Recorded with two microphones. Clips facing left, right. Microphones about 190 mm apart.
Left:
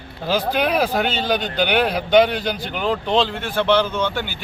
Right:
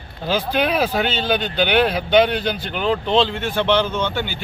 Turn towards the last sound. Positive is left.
turn(degrees=10)  # may be behind; listen again after turning